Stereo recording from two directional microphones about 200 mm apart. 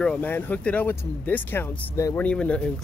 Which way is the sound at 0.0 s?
5° left (ahead or behind).